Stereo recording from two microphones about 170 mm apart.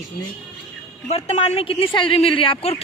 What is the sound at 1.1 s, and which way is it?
Speech, 40° left (ahead or behind).